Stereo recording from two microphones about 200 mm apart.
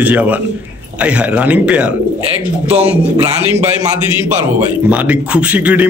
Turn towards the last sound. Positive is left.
turn(degrees=-10)  # may be behind; listen again after turning